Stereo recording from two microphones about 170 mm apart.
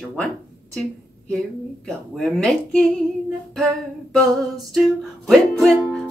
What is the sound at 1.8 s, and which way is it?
Music, 5° left (ahead or behind).